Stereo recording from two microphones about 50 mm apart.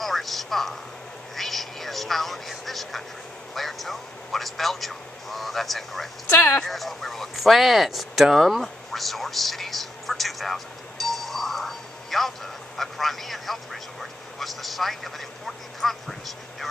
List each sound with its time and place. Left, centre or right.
0.0 s a sound: centre
3.5 s speech: centre
6.3 s speech: left
6.7 s speech: centre